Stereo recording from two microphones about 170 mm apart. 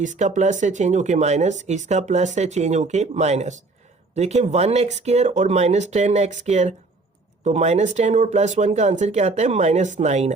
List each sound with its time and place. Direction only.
0.0 s speech: 45° right (ahead or behind)